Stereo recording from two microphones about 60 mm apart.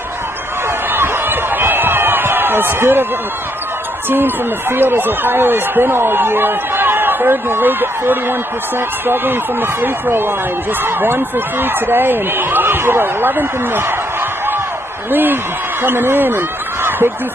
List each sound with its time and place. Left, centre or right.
0.9 s a sound: right
4.1 s speech: right
15.0 s speech: right